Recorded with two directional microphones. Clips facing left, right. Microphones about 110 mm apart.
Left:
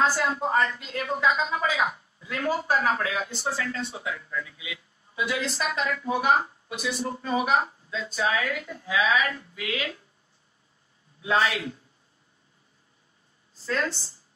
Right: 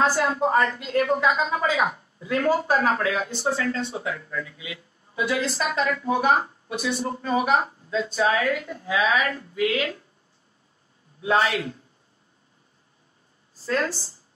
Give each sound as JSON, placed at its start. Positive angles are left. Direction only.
{"t": 0.0, "sound": "speech", "side_deg": -35}
{"t": 11.1, "sound": "speech", "side_deg": -30}
{"t": 13.6, "sound": "a woman's voice", "side_deg": -25}